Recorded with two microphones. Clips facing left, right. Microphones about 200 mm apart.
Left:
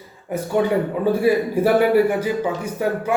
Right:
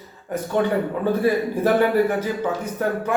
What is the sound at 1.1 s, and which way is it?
Speech, 10° left (ahead or behind).